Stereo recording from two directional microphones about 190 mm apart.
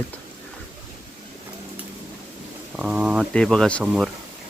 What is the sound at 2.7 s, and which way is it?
Speech, 5° right (ahead or behind).